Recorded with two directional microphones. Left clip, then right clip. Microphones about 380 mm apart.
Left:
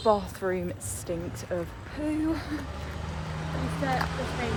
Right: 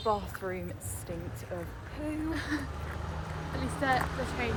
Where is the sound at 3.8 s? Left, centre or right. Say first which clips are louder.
Even; centre.